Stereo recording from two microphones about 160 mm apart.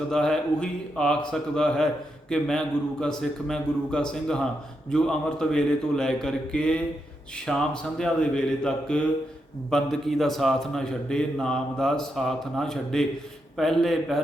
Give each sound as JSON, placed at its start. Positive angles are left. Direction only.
{"t": 0.1, "sound": "a man's voice", "side_deg": 5}